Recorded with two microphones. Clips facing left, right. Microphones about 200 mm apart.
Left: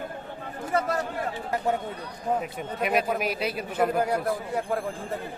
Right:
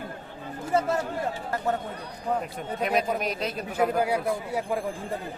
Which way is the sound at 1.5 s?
15° left (ahead or behind).